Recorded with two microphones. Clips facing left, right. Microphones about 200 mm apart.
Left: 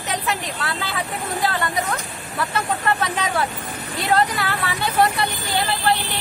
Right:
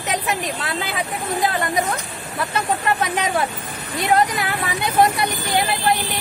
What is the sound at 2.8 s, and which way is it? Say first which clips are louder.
Speech: right 1 dB; 20° right (ahead or behind).